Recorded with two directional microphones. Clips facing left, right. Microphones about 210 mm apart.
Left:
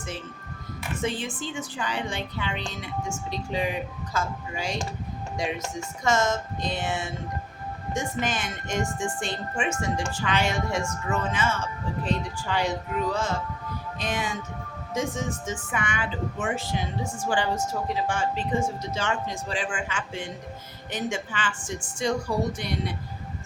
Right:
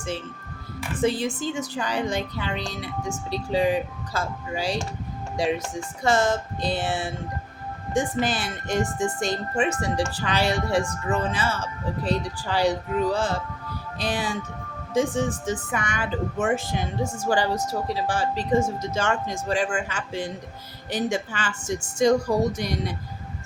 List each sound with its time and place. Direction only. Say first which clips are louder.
1.0 s a woman's voice: right 7 dB; 40° right (ahead or behind)